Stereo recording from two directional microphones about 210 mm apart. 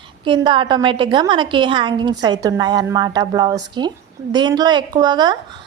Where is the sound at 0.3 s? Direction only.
25° right (ahead or behind).